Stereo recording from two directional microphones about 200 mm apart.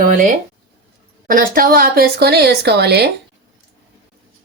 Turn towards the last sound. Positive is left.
turn(degrees=-55)  # may be behind; listen again after turning